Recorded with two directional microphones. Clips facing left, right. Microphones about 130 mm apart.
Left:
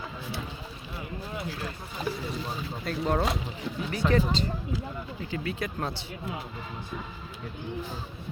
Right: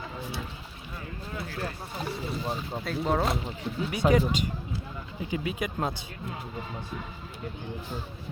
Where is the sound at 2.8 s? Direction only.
Centre (ahead or behind).